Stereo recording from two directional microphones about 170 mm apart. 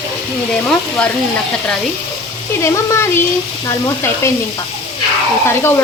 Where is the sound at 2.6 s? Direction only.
15° left (ahead or behind).